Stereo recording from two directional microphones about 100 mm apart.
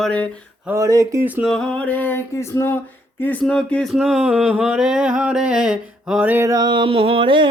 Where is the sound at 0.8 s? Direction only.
35° right (ahead or behind).